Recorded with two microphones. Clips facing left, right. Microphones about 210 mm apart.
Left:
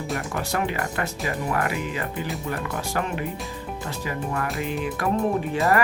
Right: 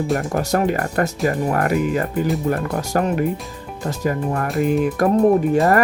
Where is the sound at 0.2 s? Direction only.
40° right (ahead or behind).